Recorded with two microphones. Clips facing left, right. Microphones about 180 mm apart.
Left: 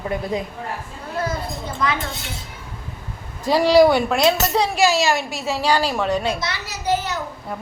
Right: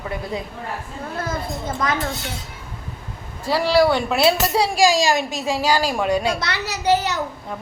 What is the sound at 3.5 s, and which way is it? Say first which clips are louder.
Speech: left 3 dB; 15° left (ahead or behind).